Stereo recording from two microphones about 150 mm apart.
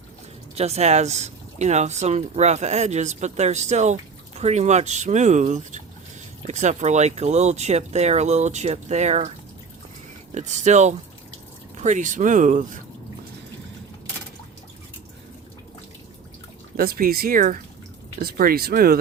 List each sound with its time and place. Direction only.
0.5 s speech: 45° right (ahead or behind)
10.3 s speech: 50° right (ahead or behind)
16.7 s speech: 85° right; by 17.6 s 65° right (ahead or behind)
18.2 s speech: 85° right